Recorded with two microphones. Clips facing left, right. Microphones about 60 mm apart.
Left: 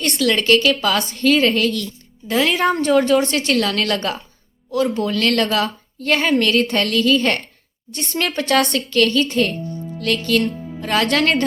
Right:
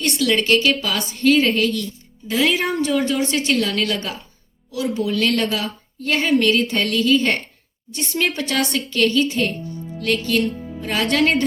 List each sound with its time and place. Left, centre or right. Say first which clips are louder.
0.0 s a woman's voice: left 1 dB; left